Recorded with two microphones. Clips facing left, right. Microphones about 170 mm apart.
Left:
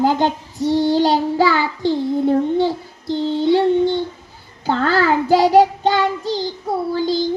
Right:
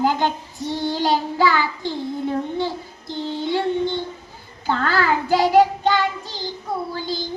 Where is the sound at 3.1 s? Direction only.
40° left (ahead or behind).